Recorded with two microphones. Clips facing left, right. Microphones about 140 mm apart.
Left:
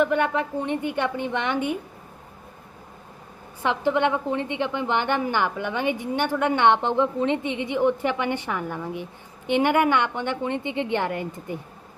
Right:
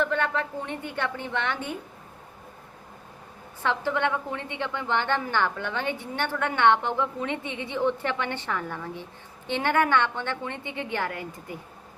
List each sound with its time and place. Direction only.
0.0 s a woman's voice: 15° left (ahead or behind)
3.6 s a woman's voice: 15° left (ahead or behind)